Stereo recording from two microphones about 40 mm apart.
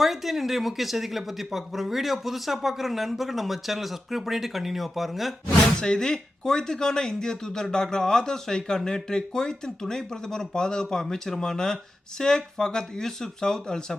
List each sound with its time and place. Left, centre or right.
0.0 s speech: centre
5.7 s speech: centre